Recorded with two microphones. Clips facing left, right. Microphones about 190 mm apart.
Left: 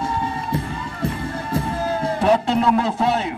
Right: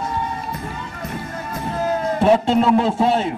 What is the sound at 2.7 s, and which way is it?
Speech, 30° right (ahead or behind).